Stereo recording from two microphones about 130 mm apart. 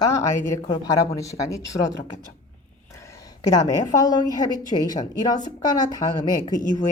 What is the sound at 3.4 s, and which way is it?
A woman's voice, 30° left (ahead or behind).